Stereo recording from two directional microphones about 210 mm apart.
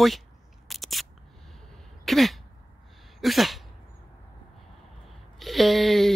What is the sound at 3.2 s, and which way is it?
Sneeze, centre (ahead or behind).